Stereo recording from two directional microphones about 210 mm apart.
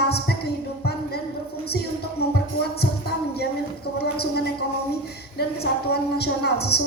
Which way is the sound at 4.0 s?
50° left (ahead or behind).